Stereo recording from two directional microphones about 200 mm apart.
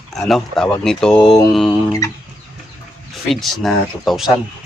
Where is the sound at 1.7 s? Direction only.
15° left (ahead or behind).